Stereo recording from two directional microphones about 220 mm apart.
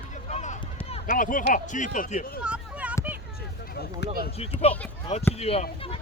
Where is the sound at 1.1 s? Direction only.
40° left (ahead or behind).